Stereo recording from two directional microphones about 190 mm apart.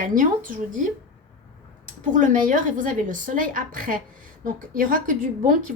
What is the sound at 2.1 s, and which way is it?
A woman's voice, 40° right (ahead or behind).